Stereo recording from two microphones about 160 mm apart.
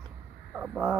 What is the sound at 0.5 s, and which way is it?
Speech, 5° right (ahead or behind).